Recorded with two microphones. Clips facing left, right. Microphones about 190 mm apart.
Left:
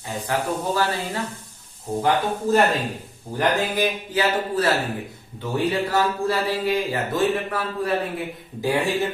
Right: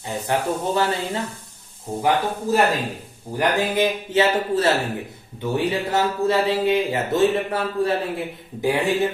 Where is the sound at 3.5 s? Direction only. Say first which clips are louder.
Right 2 dB; 25° right (ahead or behind).